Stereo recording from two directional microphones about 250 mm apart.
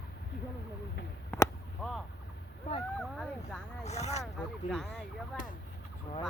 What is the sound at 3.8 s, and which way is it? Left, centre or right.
Speech, left.